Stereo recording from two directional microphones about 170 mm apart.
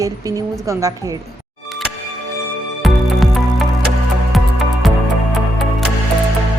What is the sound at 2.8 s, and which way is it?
Music, centre (ahead or behind).